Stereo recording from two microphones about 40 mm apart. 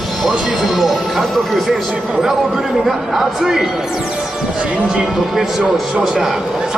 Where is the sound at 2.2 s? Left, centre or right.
Centre.